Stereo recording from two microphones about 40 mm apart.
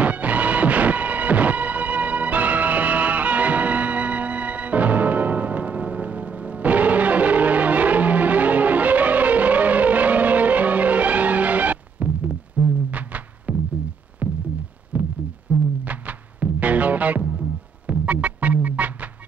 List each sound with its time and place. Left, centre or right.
0.0 s music: right
12.3 s music: right
12.9 s music: right
14.2 s a sound: right
14.9 s heart murmur: right
15.5 s music: right